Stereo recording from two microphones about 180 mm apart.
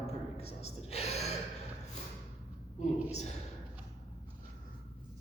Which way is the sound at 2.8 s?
40° left (ahead or behind).